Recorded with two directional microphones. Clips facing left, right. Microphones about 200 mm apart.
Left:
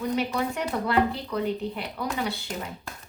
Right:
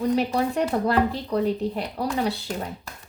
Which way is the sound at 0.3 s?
35° right (ahead or behind).